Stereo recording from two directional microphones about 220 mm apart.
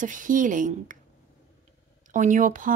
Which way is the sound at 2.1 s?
35° right (ahead or behind).